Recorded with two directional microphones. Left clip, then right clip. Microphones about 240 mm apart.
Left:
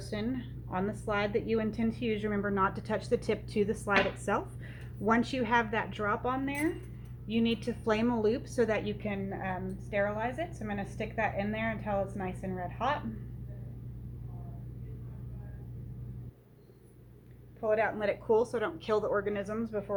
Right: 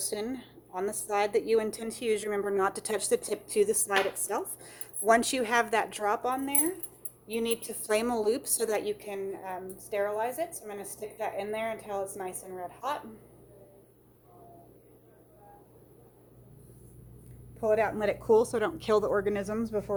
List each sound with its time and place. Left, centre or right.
0.1 s a woman's voice: right
17.6 s a woman's voice: right